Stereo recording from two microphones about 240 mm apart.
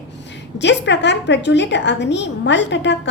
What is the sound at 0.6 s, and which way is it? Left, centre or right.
A woman's voice, left.